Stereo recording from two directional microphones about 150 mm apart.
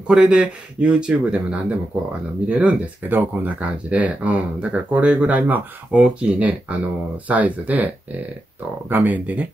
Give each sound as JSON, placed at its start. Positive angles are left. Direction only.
{"t": 0.1, "sound": "speech", "side_deg": -5}